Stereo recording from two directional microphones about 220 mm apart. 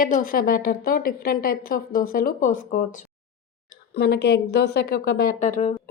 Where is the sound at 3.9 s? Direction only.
50° left (ahead or behind); by 5.7 s 35° left (ahead or behind).